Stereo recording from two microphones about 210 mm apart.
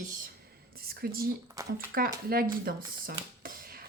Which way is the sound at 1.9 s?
45° right (ahead or behind).